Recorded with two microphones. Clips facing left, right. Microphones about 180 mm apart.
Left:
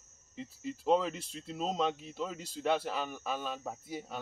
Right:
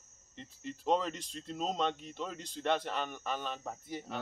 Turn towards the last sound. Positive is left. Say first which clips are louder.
# left 1 dB
turn(degrees=10)  # may be behind; listen again after turning